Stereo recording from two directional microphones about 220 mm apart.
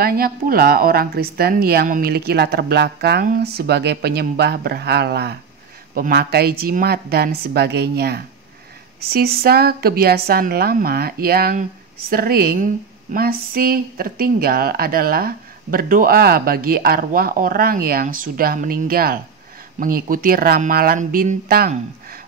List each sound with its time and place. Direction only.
0.0 s speech: 40° right (ahead or behind)